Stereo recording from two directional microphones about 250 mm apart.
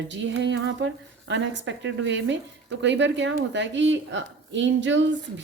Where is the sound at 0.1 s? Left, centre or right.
Right.